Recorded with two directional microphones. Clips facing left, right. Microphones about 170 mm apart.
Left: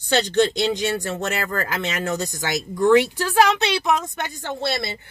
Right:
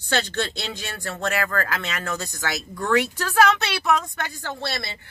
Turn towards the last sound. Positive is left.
turn(degrees=20)  # may be behind; listen again after turning